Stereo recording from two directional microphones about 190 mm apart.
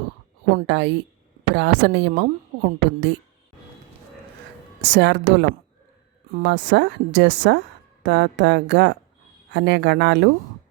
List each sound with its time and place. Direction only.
0.7 s a woman's voice: 70° right (ahead or behind)
4.8 s a woman's voice: 65° right (ahead or behind)